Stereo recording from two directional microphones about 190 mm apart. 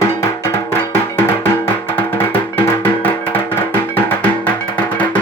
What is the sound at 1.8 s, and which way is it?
Music, 10° left (ahead or behind).